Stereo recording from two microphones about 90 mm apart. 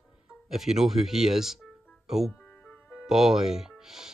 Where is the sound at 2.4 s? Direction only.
15° left (ahead or behind).